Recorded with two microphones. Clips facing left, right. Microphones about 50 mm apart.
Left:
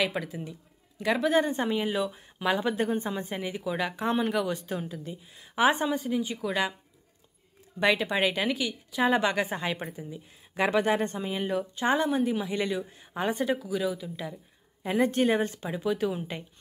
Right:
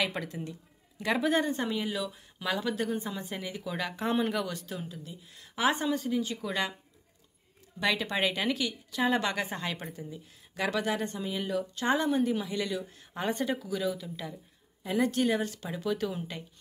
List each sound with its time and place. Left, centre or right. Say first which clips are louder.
0.0 s speech: left 3 dB; centre
1.5 s a woman's voice: left 4 dB; centre
3.4 s a woman's voice: left 5 dB; centre
4.5 s a woman's voice: left 6 dB; left; by 6.7 s centre
7.8 s a woman's voice: left 4 dB; centre
10.6 s a woman's voice: left 5 dB; left
11.9 s a woman's voice: left 1 dB; centre
12.5 s a woman's voice: left 3 dB; left
12.8 s a woman's voice: left 3 dB; centre
14.8 s a woman's voice: left 3 dB; left
15.7 s a woman's voice: left 3 dB; centre